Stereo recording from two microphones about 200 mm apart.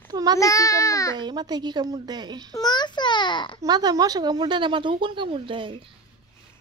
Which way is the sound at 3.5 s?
20° right (ahead or behind).